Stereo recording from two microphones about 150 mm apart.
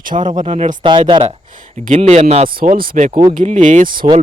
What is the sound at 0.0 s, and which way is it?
Speech, 65° right (ahead or behind).